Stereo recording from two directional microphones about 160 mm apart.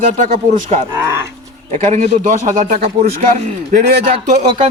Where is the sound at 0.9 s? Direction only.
15° right (ahead or behind).